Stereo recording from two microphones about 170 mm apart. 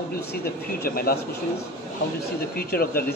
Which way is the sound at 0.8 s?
60° left (ahead or behind).